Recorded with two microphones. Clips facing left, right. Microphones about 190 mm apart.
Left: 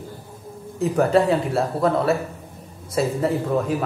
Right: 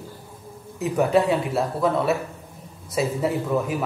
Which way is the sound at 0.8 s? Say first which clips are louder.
Left 2 dB; centre (ahead or behind).